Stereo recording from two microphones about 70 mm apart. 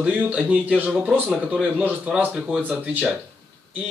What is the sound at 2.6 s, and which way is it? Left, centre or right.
Speech, right.